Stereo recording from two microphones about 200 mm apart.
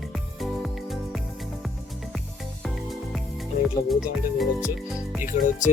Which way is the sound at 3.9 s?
Centre (ahead or behind).